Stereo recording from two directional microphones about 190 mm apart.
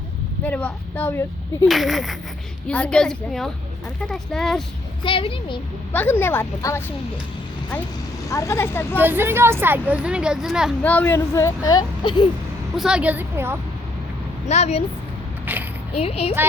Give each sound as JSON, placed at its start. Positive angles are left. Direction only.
{"t": 0.4, "sound": "a woman's voice", "side_deg": 10}
{"t": 1.6, "sound": "a woman's voice", "side_deg": 0}
{"t": 5.0, "sound": "speech", "side_deg": 25}
{"t": 5.9, "sound": "a woman's voice", "side_deg": 10}
{"t": 8.3, "sound": "a woman's voice", "side_deg": 15}
{"t": 9.0, "sound": "speech", "side_deg": -10}
{"t": 10.8, "sound": "a woman's voice", "side_deg": 10}
{"t": 12.7, "sound": "speech", "side_deg": -5}
{"t": 14.4, "sound": "speech", "side_deg": 35}
{"t": 16.0, "sound": "speech", "side_deg": 30}